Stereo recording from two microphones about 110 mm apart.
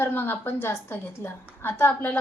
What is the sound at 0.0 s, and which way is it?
A woman's voice, 20° left (ahead or behind).